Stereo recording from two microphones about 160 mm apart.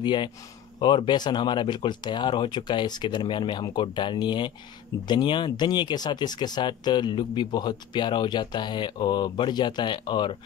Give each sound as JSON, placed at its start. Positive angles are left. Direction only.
{"t": 0.0, "sound": "speech", "side_deg": 30}